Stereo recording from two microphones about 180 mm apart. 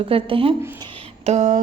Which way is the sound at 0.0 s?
30° right (ahead or behind).